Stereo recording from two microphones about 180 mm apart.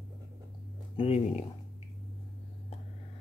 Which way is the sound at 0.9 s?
35° left (ahead or behind).